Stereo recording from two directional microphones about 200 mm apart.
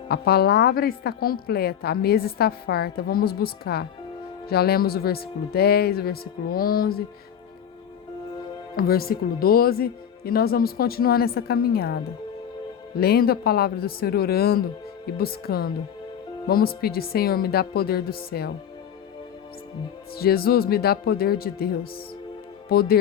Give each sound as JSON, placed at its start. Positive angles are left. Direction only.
{"t": 0.1, "sound": "a woman's voice", "side_deg": 50}
{"t": 8.7, "sound": "a woman's voice", "side_deg": 50}
{"t": 13.0, "sound": "a woman's voice", "side_deg": 50}
{"t": 20.1, "sound": "a woman's voice", "side_deg": 50}